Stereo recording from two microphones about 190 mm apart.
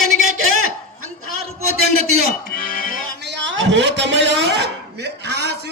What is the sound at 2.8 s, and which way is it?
Music, 90° right.